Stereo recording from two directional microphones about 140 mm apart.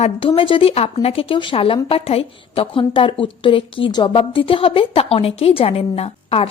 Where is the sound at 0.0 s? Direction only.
40° left (ahead or behind).